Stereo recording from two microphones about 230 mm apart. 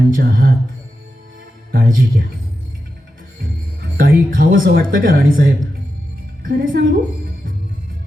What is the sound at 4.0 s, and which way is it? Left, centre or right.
A woman's voice, right.